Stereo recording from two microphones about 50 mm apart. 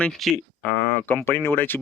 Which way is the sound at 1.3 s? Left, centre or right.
Left.